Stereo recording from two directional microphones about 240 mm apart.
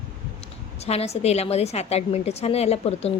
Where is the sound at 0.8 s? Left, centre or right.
Left.